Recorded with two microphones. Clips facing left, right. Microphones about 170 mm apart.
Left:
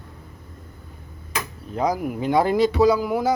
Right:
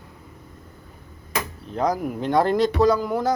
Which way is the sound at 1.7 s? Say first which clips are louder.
Even; 5° left (ahead or behind).